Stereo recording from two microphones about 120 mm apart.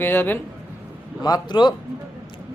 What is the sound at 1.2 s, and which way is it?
Speech, 35° left (ahead or behind).